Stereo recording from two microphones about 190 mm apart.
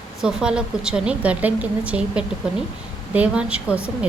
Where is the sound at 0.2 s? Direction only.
5° right (ahead or behind).